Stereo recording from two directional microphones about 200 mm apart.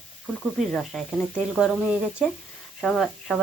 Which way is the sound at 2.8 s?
Centre (ahead or behind).